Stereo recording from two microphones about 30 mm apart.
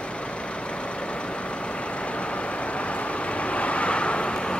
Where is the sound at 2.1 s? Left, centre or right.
Left.